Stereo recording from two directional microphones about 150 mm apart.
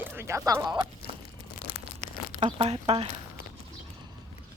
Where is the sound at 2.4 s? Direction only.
45° right (ahead or behind).